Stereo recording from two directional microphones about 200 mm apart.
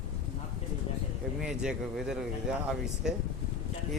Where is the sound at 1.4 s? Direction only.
5° right (ahead or behind).